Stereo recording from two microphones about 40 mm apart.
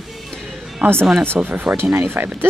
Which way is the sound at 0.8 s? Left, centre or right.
Right.